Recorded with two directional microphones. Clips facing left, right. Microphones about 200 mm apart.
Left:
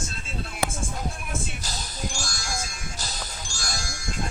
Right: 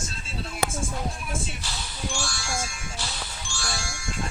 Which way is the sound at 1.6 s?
40° left (ahead or behind).